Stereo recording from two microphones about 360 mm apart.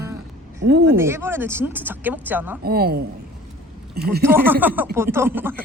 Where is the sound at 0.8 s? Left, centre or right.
Centre.